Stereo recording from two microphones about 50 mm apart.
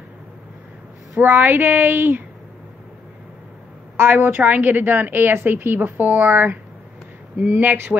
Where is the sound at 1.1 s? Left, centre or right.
Right.